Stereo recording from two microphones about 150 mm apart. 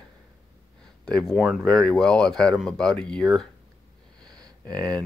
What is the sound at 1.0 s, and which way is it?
Speech, 5° left (ahead or behind).